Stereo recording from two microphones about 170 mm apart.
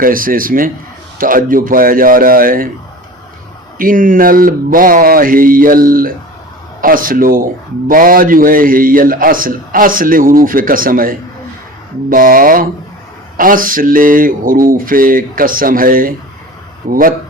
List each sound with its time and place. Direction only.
0.0 s a man's voice: 55° right (ahead or behind)
3.8 s a man's voice: 55° right (ahead or behind)